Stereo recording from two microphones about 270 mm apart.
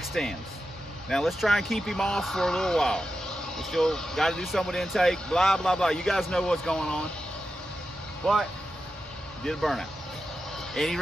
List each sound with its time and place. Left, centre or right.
0.1 s speech: centre
8.2 s speech: centre